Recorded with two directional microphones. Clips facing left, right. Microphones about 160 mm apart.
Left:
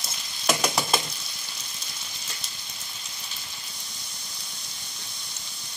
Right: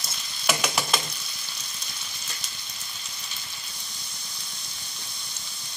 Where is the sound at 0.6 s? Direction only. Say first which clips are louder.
Left 2 dB; 25° left (ahead or behind).